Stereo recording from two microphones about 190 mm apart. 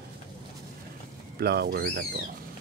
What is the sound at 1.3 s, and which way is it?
Speech, 55° right (ahead or behind).